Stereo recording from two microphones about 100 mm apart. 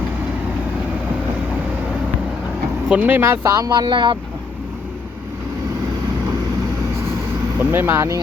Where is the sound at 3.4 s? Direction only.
35° right (ahead or behind); by 4.2 s 50° right (ahead or behind).